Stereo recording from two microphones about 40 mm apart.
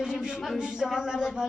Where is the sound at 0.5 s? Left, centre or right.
Centre.